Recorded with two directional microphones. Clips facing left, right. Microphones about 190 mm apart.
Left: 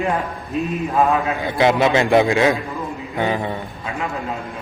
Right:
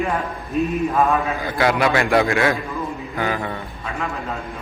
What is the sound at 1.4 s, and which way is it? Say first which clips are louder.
A man's voice: left 3 dB; 20° left (ahead or behind).